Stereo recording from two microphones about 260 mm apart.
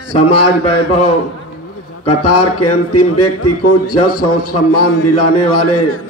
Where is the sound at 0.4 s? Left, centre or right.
Left.